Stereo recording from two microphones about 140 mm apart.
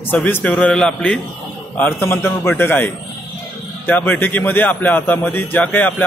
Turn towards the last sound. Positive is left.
turn(degrees=10)  # may be behind; listen again after turning